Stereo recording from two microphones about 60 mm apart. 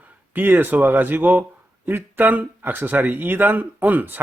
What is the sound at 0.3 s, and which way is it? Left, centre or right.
A man's voice, right.